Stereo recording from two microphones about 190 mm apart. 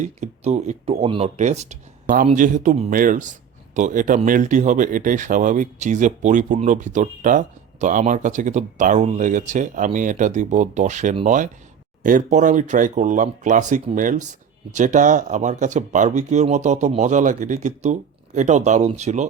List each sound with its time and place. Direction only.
0.0 s speech: 35° right (ahead or behind)